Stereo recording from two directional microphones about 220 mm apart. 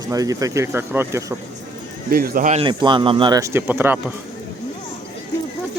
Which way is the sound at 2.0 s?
45° right (ahead or behind).